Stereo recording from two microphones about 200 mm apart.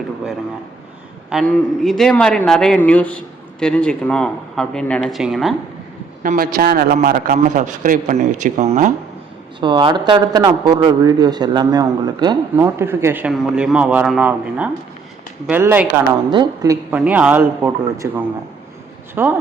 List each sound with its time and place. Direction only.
1.3 s speech: centre (ahead or behind)
6.2 s a man's voice: 45° right (ahead or behind)
9.6 s a man's voice: 25° right (ahead or behind)
16.3 s a man's voice: 20° right (ahead or behind)
16.9 s a man's voice: 10° right (ahead or behind)